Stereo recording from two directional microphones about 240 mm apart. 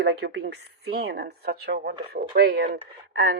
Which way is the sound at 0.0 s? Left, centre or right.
Right.